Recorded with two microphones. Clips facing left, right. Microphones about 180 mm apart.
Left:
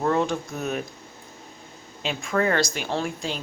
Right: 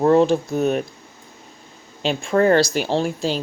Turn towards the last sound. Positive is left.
turn(degrees=-30)  # may be behind; listen again after turning